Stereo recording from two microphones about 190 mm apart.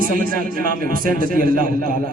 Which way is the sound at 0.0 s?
45° right (ahead or behind).